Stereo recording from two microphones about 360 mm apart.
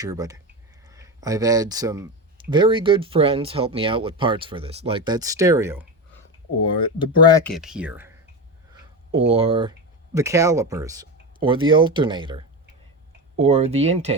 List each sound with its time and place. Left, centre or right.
0.0 s speech: centre
6.7 s speech: centre
7.5 s speech: centre
9.1 s speech: centre